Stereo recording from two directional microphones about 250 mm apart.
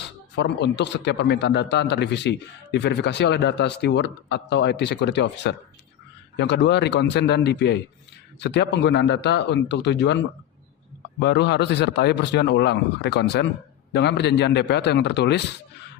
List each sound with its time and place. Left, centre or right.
0.3 s speech: left